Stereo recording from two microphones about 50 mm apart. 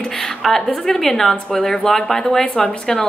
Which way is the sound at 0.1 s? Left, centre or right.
Centre.